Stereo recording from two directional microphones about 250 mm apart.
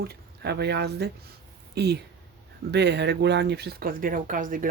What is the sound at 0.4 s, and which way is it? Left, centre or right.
Speech, right.